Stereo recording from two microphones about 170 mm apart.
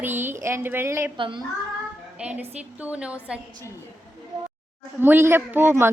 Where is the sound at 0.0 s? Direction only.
10° right (ahead or behind).